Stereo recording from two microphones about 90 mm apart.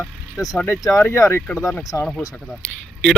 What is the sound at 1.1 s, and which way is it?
Speech, 30° left (ahead or behind).